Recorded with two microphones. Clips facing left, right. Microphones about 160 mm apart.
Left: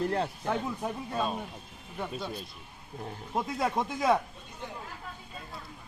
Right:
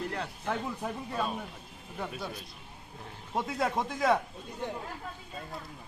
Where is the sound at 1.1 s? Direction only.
20° left (ahead or behind).